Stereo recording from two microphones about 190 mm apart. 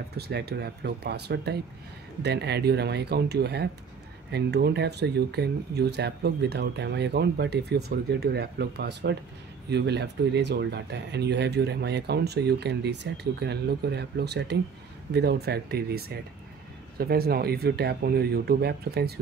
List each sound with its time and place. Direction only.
0.1 s speech: 60° right (ahead or behind)